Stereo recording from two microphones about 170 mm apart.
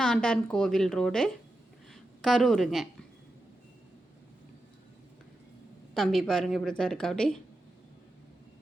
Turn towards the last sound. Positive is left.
turn(degrees=5)  # may be behind; listen again after turning